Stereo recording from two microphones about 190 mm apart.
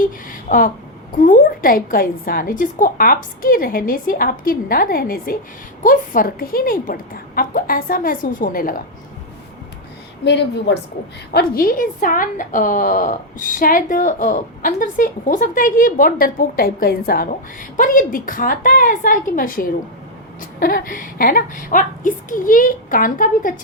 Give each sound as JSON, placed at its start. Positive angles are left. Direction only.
{"t": 0.4, "sound": "a woman's voice", "side_deg": 45}
{"t": 10.2, "sound": "a woman's voice", "side_deg": 65}
{"t": 11.3, "sound": "a woman's voice", "side_deg": 50}